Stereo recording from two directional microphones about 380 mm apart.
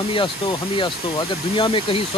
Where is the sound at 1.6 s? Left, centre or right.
Centre.